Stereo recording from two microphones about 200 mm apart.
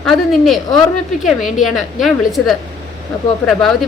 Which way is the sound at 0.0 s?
Centre (ahead or behind).